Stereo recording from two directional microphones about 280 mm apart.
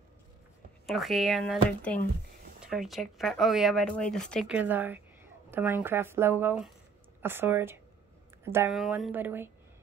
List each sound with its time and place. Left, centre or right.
0.8 s a woman's voice: centre